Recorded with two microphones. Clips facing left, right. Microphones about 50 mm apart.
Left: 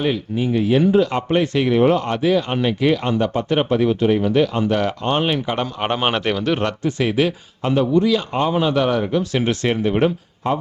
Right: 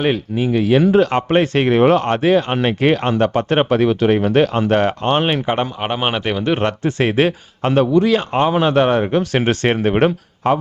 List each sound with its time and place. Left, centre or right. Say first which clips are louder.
0.3 s speech: right 2 dB; right
0.9 s speech: right 3 dB; right
1.8 s speech: right 4 dB; right
5.8 s speech: even; centre
6.4 s speech: right 2 dB; right
6.8 s speech: right 3 dB; right
7.7 s speech: right 3 dB; right
8.6 s speech: right 4 dB; right